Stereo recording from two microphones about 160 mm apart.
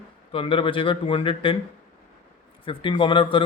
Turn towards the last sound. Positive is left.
turn(degrees=30)  # may be behind; listen again after turning